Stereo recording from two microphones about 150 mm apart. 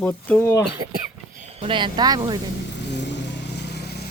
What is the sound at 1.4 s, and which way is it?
Speech, 45° right (ahead or behind).